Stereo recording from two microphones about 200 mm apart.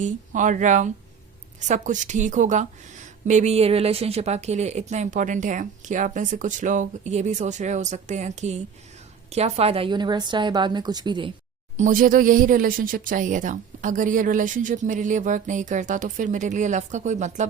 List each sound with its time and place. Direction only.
0.0 s a woman's voice: 40° right (ahead or behind); by 11.3 s 20° right (ahead or behind)
11.8 s a woman's voice: 40° right (ahead or behind)